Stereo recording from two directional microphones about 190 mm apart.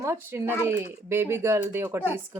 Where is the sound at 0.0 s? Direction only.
15° right (ahead or behind).